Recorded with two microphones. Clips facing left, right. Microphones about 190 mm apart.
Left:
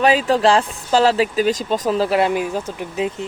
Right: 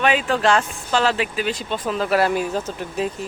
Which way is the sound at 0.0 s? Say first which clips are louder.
Left 4 dB; 35° left (ahead or behind).